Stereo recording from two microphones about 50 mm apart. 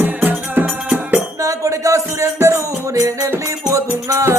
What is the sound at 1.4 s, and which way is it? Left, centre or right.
Music, right.